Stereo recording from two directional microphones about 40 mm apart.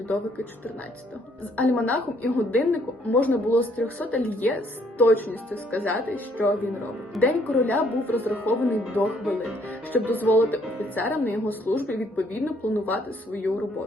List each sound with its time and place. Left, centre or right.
1.5 s a woman's voice: left
7.2 s a woman's voice: left